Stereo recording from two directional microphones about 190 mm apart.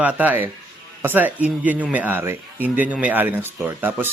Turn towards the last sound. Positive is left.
turn(degrees=-10)  # may be behind; listen again after turning